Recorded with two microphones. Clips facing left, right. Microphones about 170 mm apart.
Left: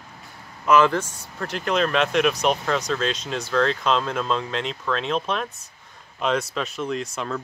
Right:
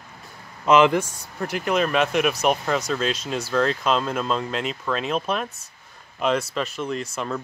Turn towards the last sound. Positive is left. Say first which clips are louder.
# even
turn(degrees=0)  # may be behind; listen again after turning